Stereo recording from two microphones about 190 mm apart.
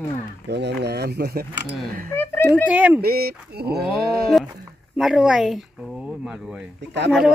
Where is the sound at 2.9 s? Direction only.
55° right (ahead or behind).